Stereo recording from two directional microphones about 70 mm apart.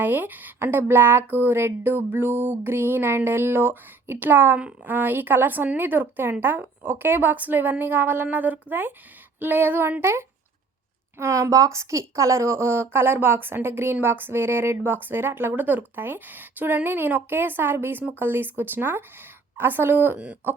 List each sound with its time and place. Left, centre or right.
0.0 s a woman's voice: right
11.2 s a woman's voice: right
20.1 s speech: centre